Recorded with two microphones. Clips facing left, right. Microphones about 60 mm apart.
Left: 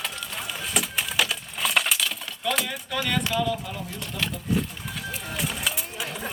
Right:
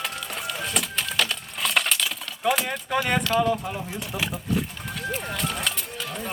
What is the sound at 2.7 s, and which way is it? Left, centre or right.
Speech, right.